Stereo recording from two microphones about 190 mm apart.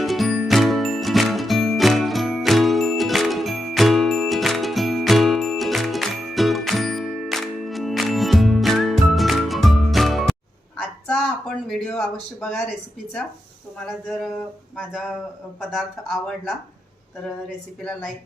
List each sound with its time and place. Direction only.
0.0 s music: centre (ahead or behind)
11.1 s a sound: 5° left (ahead or behind)
13.8 s speech: centre (ahead or behind)